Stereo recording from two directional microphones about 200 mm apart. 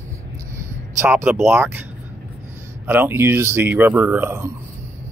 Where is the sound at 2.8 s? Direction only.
10° right (ahead or behind).